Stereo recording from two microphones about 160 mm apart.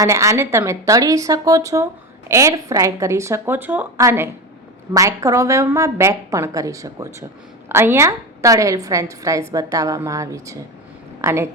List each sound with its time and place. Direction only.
0.0 s a woman's voice: 20° right (ahead or behind)